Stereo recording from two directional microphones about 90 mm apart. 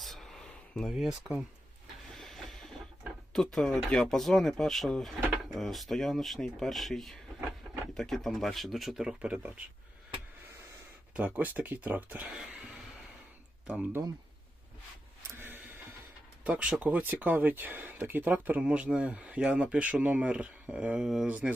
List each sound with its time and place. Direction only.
0.0 s a sound: 5° left (ahead or behind)
0.9 s speech: 5° right (ahead or behind)
2.1 s printer: centre (ahead or behind)
3.3 s speech: 5° left (ahead or behind)
9.3 s speech: 15° right (ahead or behind)
11.3 s speech: 20° right (ahead or behind)
13.7 s speech: 15° right (ahead or behind)
15.4 s vehicle: 20° right (ahead or behind)
16.4 s speech: 15° right (ahead or behind)